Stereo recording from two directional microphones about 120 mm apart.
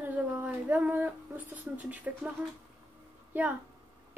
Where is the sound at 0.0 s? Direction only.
15° right (ahead or behind).